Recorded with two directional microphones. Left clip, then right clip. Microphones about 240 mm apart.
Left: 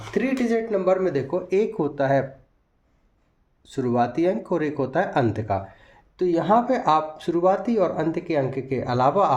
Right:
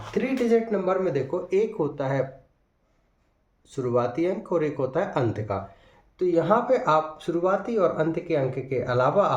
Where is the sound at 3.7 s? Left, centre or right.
Left.